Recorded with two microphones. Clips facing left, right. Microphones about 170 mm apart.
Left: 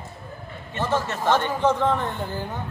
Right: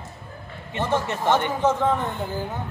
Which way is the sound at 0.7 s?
15° right (ahead or behind).